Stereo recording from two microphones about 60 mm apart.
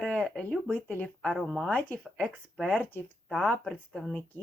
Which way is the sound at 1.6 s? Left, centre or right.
Left.